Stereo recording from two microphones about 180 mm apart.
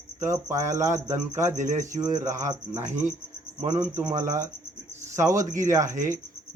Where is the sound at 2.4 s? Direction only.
15° right (ahead or behind).